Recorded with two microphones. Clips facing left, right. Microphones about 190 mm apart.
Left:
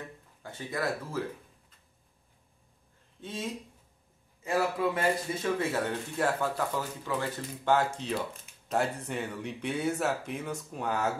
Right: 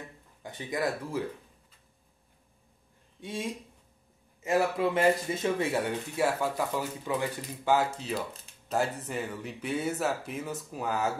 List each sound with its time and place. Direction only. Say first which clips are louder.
0.4 s speech: right 2 dB; 15° right (ahead or behind)
3.2 s speech: right 1 dB; 15° right (ahead or behind)